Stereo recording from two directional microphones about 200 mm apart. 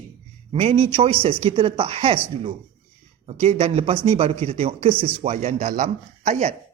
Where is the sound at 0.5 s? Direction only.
30° right (ahead or behind).